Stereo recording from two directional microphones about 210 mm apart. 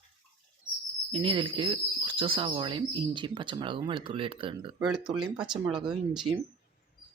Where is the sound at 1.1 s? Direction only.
25° right (ahead or behind).